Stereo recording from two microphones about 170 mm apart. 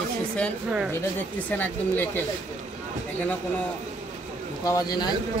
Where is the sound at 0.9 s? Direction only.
10° left (ahead or behind).